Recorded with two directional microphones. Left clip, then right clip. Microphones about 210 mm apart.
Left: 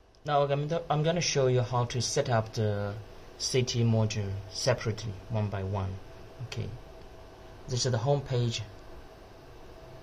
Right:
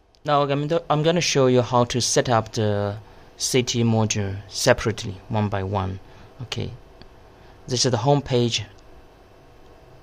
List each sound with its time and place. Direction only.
0.2 s a man's voice: 50° right (ahead or behind)
7.6 s a man's voice: 55° right (ahead or behind)